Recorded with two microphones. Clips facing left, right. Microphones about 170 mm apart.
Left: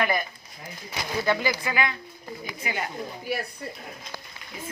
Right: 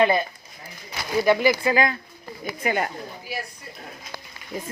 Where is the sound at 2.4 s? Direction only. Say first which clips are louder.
Right 8 dB; 50° right (ahead or behind).